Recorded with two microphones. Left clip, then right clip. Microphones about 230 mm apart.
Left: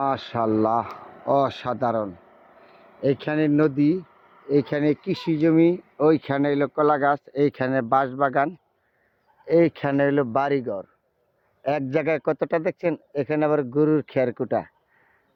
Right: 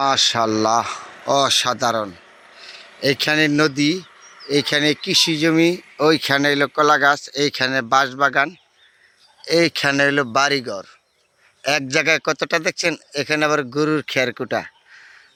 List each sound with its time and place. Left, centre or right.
0.0 s speech: centre
2.7 s a sound: left
3.0 s speech: centre
4.2 s insect: left
4.4 s speech: centre
9.4 s speech: centre